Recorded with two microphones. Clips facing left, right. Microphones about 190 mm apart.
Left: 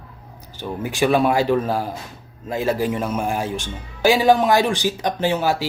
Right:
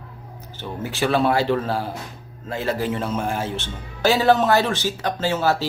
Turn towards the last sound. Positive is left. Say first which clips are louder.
# left 1 dB
turn(degrees=15)  # may be behind; listen again after turning